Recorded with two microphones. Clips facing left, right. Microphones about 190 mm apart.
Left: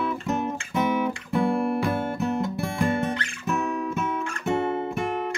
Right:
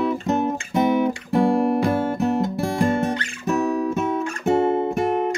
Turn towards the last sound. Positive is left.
turn(degrees=-40)  # may be behind; listen again after turning